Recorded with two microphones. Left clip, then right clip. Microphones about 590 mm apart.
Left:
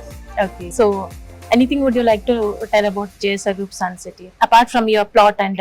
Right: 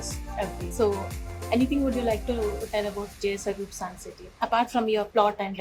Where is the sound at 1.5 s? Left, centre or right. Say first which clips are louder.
Left 10 dB; left.